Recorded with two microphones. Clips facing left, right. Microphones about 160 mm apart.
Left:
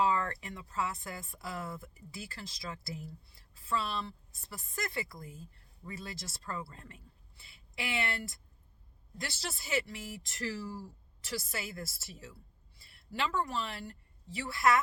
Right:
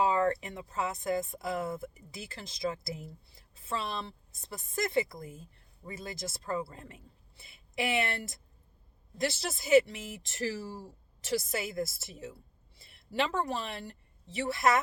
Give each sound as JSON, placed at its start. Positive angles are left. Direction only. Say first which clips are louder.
{"t": 0.0, "sound": "speech", "louder": "right 4 dB", "side_deg": -20}